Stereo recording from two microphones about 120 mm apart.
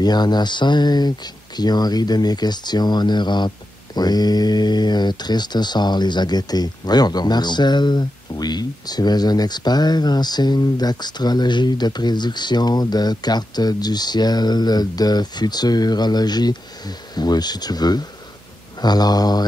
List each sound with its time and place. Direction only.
0.0 s speech: 35° left (ahead or behind)